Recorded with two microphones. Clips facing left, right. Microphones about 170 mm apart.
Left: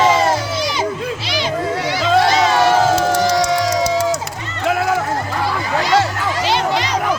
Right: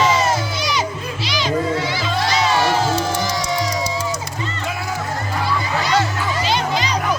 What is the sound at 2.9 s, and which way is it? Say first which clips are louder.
Music: left 6 dB; 75° left (ahead or behind).